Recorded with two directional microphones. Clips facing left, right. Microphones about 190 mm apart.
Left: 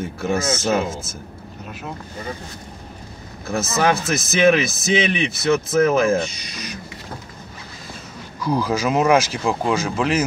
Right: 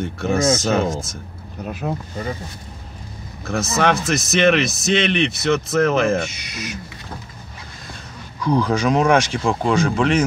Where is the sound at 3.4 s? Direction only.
Centre (ahead or behind).